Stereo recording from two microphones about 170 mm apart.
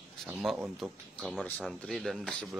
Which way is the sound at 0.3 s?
Centre (ahead or behind).